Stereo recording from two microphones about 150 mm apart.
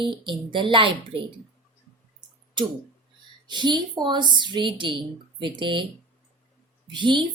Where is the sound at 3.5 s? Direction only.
30° right (ahead or behind).